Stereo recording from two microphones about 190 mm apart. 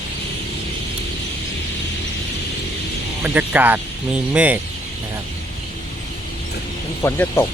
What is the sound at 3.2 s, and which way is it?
Speech, 10° right (ahead or behind).